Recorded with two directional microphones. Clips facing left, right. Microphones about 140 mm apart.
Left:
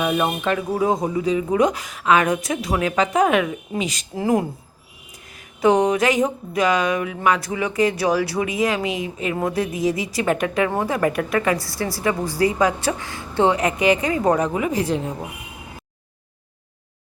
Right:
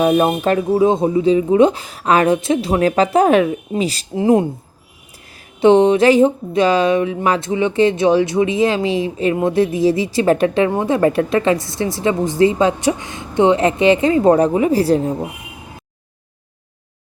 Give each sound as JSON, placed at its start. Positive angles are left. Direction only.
{"t": 0.0, "sound": "speech", "side_deg": -35}
{"t": 0.7, "sound": "a woman's voice", "side_deg": -25}
{"t": 4.1, "sound": "a woman's voice", "side_deg": -25}
{"t": 5.5, "sound": "a woman's voice", "side_deg": -30}